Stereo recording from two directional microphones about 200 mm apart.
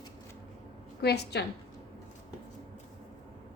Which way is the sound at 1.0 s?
55° left (ahead or behind).